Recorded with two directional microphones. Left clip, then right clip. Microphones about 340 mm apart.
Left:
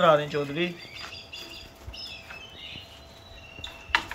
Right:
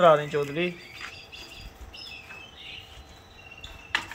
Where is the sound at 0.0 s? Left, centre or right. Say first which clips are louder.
Right 2 dB; centre.